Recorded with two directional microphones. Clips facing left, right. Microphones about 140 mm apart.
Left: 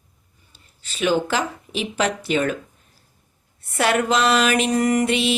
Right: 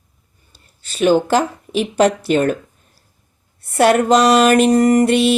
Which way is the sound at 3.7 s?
40° right (ahead or behind).